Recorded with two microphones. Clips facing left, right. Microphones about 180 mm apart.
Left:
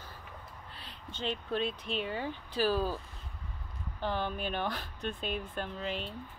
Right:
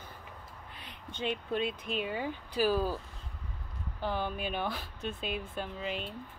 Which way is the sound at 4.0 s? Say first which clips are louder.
Even; 10° right (ahead or behind).